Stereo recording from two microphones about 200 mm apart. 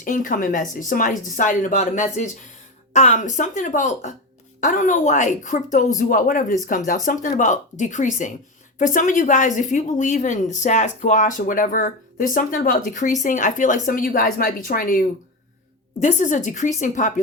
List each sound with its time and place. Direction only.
0.0 s a woman's voice: 40° left (ahead or behind)